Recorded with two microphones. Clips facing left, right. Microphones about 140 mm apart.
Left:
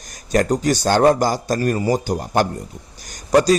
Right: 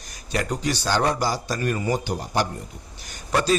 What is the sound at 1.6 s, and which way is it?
A man's voice, 35° left (ahead or behind).